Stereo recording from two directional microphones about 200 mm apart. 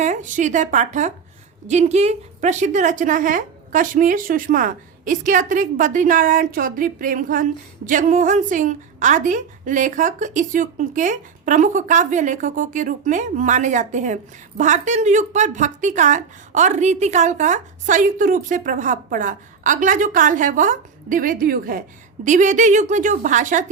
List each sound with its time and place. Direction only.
0.0 s a woman's voice: 35° right (ahead or behind)